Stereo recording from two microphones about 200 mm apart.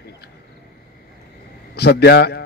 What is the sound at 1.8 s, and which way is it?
Speech, 55° left (ahead or behind).